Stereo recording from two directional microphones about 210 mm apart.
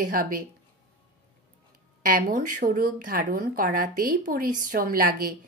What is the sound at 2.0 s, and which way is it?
A woman's voice, 40° right (ahead or behind).